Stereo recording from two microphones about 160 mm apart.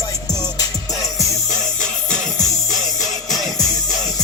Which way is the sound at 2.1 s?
5° left (ahead or behind).